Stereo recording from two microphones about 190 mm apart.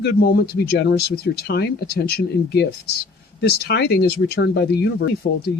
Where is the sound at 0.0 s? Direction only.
55° left (ahead or behind).